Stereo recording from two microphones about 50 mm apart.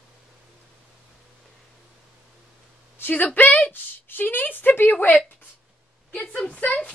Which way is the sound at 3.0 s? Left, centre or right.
Left.